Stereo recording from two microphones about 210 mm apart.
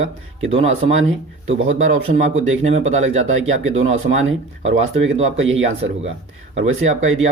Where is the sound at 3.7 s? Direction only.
30° right (ahead or behind).